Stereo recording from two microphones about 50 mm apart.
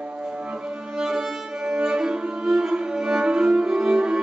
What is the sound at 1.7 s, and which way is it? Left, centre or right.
Music, centre.